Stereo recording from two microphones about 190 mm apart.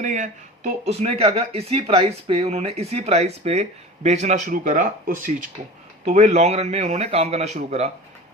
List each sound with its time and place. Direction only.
0.0 s speech: 40° right (ahead or behind)